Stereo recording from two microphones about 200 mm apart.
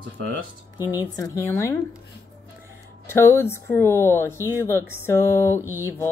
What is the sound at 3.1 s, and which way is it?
Speech, 10° left (ahead or behind).